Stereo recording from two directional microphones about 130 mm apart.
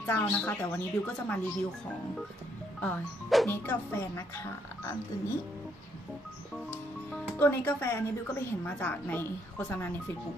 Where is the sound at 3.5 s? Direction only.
20° left (ahead or behind).